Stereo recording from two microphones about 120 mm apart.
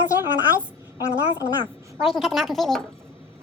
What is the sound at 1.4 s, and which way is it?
Speech, 10° right (ahead or behind).